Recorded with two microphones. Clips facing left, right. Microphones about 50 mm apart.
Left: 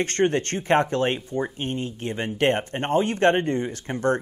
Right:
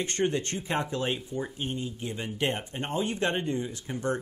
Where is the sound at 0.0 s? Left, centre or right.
Left.